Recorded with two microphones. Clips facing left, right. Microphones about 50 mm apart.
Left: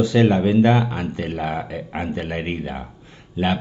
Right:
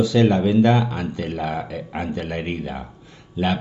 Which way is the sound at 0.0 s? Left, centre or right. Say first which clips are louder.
Even; left.